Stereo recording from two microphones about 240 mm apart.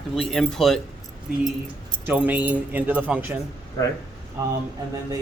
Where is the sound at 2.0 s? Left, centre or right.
Centre.